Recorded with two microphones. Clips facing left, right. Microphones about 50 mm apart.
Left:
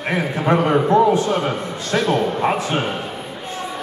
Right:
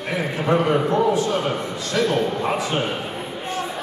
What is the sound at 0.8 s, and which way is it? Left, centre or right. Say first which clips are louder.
Speech: left 4 dB; left.